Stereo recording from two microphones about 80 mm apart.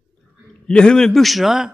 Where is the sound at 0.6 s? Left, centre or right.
Centre.